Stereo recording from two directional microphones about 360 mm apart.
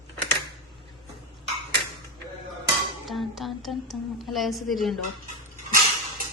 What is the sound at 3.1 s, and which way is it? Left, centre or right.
A woman's voice, centre.